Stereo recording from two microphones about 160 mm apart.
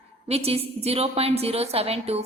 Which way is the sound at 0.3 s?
40° right (ahead or behind).